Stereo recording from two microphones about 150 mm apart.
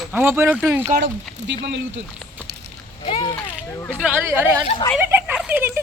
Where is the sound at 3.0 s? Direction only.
30° left (ahead or behind).